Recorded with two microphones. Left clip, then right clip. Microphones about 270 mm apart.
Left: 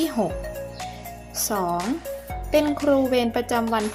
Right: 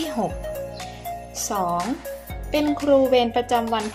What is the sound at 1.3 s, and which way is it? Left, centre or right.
Speech, left.